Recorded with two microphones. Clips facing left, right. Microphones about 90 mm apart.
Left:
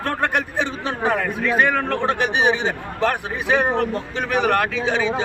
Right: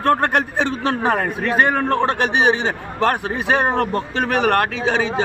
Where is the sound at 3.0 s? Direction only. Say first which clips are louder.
Right 2 dB; 55° right (ahead or behind).